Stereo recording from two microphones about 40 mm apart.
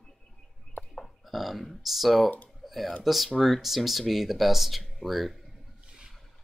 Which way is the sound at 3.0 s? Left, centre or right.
Centre.